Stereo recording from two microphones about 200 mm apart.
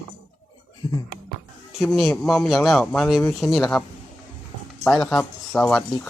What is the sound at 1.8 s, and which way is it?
Speech, centre (ahead or behind).